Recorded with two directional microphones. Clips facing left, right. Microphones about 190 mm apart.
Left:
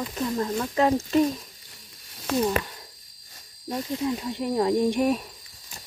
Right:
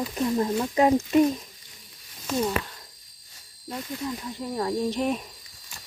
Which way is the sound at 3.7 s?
20° left (ahead or behind).